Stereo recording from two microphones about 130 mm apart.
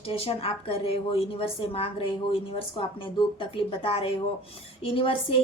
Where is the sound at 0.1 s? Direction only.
50° left (ahead or behind).